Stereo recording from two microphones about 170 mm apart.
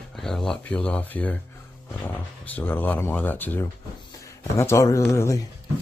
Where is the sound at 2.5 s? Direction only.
10° left (ahead or behind).